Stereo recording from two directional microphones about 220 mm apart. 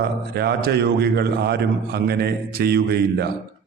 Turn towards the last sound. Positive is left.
turn(degrees=-50)  # may be behind; listen again after turning